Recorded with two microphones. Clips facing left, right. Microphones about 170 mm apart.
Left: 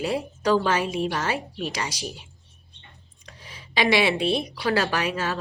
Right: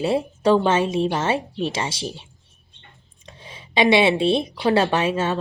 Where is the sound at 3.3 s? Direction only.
25° right (ahead or behind).